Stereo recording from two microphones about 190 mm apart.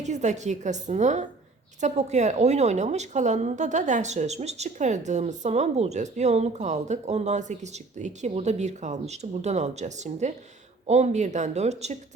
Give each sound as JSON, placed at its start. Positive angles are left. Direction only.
{"t": 0.0, "sound": "a woman's voice", "side_deg": -40}